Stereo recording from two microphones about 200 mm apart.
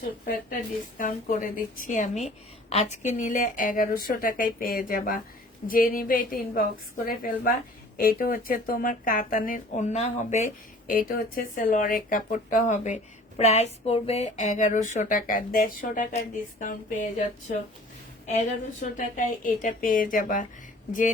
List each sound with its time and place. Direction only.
0.9 s a woman's voice: 40° left (ahead or behind)
18.3 s a woman's voice: 40° left (ahead or behind)